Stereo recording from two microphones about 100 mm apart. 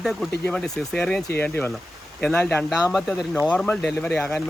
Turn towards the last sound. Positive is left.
turn(degrees=5)  # may be behind; listen again after turning